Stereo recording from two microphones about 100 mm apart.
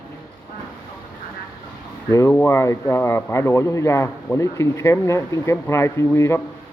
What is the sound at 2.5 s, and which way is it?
A man's voice, 30° left (ahead or behind).